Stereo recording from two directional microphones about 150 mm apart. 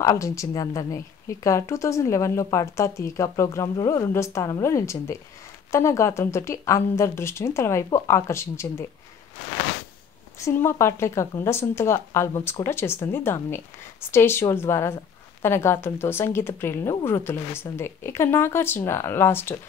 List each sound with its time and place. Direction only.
0.0 s speech: 20° left (ahead or behind)
10.4 s speech: 15° left (ahead or behind)